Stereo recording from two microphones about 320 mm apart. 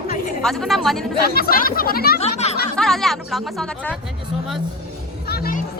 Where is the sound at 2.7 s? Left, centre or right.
Centre.